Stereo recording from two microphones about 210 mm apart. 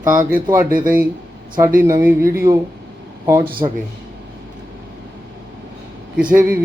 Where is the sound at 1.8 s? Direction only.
15° right (ahead or behind).